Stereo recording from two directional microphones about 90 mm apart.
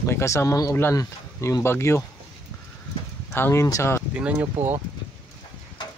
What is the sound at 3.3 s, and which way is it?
Speech, 30° left (ahead or behind).